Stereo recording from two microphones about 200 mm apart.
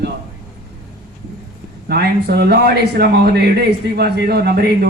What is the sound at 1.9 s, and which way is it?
Speech, 55° right (ahead or behind).